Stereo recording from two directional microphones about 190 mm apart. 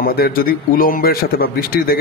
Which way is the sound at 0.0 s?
50° left (ahead or behind).